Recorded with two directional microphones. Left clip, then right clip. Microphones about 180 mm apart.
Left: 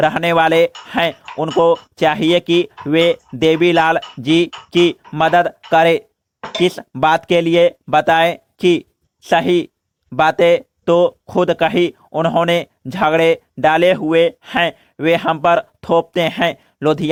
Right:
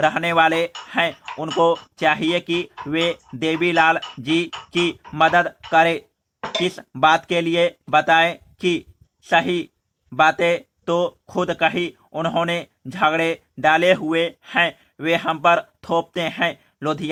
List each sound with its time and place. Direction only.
0.0 s speech: 30° left (ahead or behind)
1.1 s a sound: centre (ahead or behind)
1.6 s speech: 25° left (ahead or behind)
4.5 s speech: centre (ahead or behind)
5.1 s speech: 35° left (ahead or behind)
6.4 s speech: centre (ahead or behind)
7.0 s speech: 35° left (ahead or behind)